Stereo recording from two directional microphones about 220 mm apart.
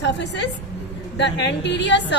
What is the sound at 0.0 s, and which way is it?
A woman's voice, 55° left (ahead or behind).